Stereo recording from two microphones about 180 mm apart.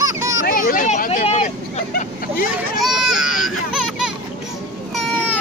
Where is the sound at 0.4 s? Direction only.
50° left (ahead or behind).